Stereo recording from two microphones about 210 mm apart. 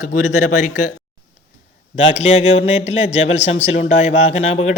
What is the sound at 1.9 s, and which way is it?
A man's voice, 30° left (ahead or behind).